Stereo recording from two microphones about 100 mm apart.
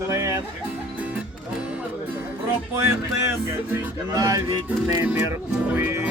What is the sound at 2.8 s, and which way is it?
Speech, 25° right (ahead or behind).